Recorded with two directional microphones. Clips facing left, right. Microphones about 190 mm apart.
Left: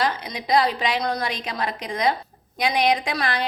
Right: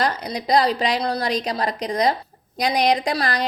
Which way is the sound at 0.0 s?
40° right (ahead or behind).